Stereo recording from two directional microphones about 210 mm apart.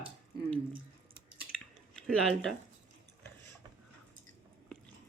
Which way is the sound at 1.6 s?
Centre (ahead or behind).